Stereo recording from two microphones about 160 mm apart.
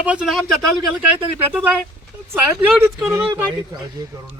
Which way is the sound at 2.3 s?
15° right (ahead or behind).